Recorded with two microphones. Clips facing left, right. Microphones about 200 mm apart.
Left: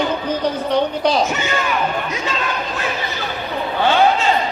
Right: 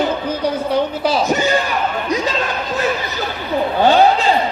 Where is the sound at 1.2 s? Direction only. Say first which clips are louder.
Right 4 dB; 35° right (ahead or behind).